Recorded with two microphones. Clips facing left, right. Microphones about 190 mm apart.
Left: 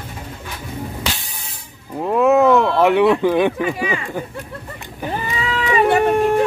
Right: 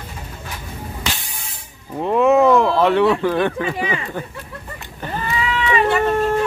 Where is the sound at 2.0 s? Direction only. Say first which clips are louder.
Even; centre (ahead or behind).